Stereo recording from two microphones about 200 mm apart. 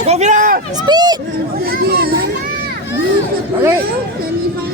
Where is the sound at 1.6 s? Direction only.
50° right (ahead or behind).